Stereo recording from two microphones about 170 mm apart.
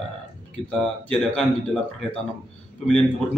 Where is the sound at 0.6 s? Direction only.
5° left (ahead or behind).